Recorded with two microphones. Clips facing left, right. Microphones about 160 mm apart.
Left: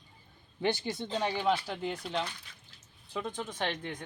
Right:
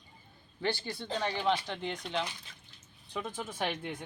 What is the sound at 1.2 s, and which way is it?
Speech, 10° left (ahead or behind).